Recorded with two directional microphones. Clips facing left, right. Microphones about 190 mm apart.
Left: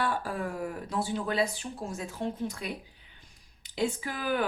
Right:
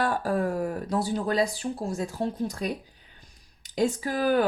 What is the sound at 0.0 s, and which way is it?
Speech, 40° right (ahead or behind).